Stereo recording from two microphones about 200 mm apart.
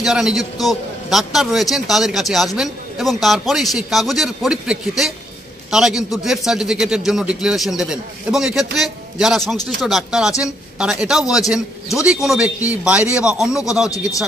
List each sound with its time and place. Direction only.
0.0 s a man's voice: centre (ahead or behind)
13.8 s speech: 15° left (ahead or behind)